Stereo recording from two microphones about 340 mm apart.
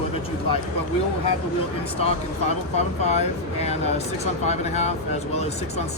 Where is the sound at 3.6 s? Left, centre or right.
Centre.